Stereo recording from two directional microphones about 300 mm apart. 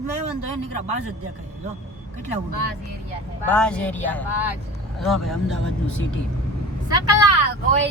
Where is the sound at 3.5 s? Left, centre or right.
Centre.